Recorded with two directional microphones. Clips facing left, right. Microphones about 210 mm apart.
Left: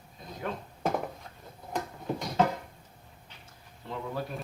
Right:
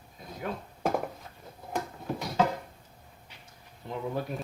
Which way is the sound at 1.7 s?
5° right (ahead or behind).